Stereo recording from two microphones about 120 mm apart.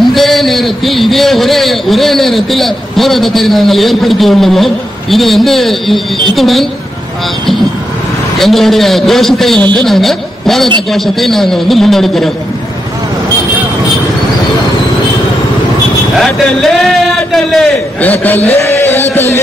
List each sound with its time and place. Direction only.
0.1 s a sound: centre (ahead or behind)
6.3 s a man's voice: centre (ahead or behind)
8.4 s a man's voice: centre (ahead or behind)
16.2 s a man's voice: 5° left (ahead or behind)
18.0 s a man's voice: 15° left (ahead or behind)
19.1 s a sound: 20° left (ahead or behind)